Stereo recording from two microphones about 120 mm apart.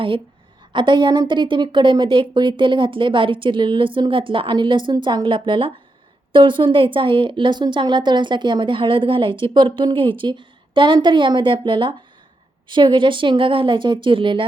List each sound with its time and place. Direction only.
0.7 s a woman's voice: 40° right (ahead or behind)